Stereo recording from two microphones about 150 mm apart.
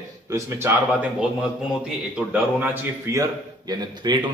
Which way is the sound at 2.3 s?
10° right (ahead or behind).